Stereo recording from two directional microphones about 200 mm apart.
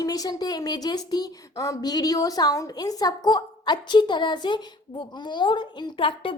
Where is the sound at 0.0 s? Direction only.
20° left (ahead or behind).